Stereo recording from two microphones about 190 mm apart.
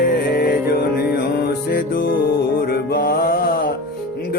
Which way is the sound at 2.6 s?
55° left (ahead or behind).